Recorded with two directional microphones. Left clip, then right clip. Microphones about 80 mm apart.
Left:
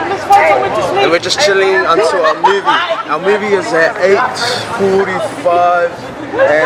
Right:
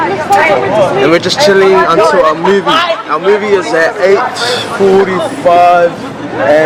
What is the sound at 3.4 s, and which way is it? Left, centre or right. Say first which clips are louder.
Speech: right 2 dB; centre.